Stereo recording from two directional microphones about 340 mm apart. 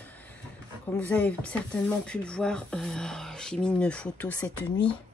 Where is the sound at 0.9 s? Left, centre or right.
Centre.